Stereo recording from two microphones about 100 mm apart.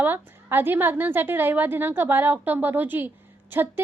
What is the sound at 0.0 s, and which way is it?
A woman's voice, 20° right (ahead or behind).